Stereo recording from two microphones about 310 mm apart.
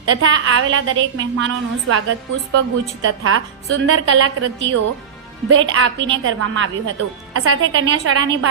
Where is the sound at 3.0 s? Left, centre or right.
Right.